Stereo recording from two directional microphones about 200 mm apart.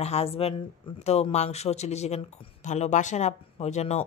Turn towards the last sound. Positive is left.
turn(degrees=35)  # may be behind; listen again after turning